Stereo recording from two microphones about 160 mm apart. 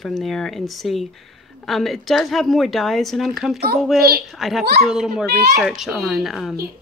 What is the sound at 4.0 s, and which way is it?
Speech, 75° right (ahead or behind).